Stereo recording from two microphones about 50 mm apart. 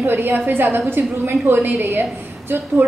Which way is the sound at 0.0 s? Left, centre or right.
Right.